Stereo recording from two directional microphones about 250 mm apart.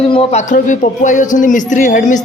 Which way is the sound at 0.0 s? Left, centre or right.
Left.